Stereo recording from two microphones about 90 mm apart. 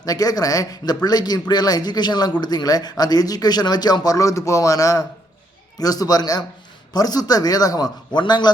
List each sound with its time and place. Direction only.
0.0 s speech: 45° left (ahead or behind)
8.2 s a man's voice: 55° left (ahead or behind)